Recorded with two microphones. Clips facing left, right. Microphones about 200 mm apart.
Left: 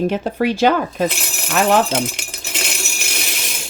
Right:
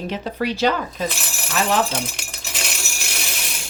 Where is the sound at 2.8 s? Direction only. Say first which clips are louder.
Left 3 dB; 20° left (ahead or behind).